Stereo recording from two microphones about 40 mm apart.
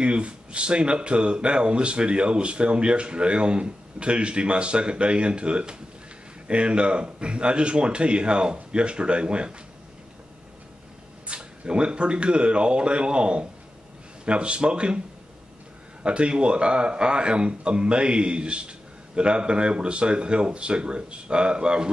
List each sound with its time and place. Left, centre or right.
0.0 s a man's voice: right
11.2 s a man's voice: right
16.0 s a man's voice: right